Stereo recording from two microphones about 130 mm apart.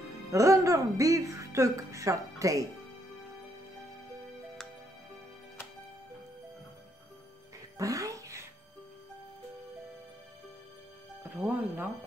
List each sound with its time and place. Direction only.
0.3 s a woman's voice: 25° right (ahead or behind)
7.7 s music: 25° right (ahead or behind)
11.2 s music: 15° right (ahead or behind)